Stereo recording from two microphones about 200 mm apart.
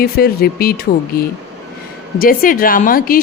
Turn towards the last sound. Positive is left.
turn(degrees=45)  # may be behind; listen again after turning